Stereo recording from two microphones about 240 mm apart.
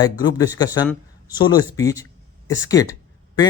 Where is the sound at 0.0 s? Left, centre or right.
Centre.